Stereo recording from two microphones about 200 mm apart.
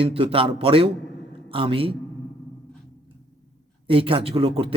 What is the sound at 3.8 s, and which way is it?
Speech, 25° right (ahead or behind).